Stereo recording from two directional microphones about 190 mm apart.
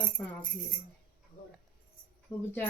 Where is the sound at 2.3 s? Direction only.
5° left (ahead or behind).